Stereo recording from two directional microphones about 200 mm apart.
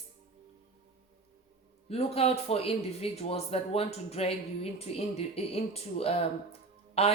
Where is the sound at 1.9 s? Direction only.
30° left (ahead or behind).